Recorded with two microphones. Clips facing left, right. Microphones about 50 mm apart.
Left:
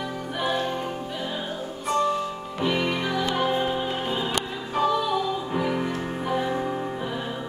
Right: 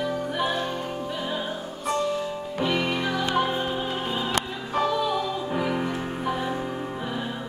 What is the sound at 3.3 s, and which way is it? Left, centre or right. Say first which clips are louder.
Music: left 1 dB; centre.